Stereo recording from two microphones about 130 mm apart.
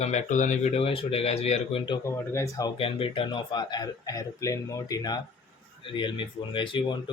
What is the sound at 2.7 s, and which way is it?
Speech, 45° left (ahead or behind).